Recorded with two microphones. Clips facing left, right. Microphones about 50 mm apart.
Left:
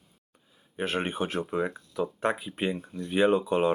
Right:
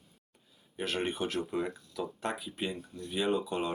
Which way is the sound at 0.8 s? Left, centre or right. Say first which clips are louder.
Left 4 dB; left.